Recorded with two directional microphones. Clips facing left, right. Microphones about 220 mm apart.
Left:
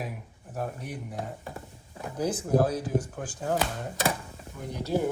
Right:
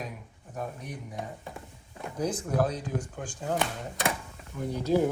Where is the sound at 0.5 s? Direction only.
5° left (ahead or behind).